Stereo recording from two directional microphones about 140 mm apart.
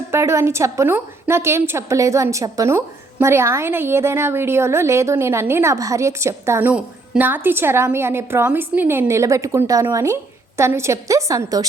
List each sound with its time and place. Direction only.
0.1 s a woman's voice: 20° right (ahead or behind)